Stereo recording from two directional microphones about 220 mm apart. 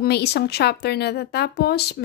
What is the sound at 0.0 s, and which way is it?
A woman's voice, 50° left (ahead or behind).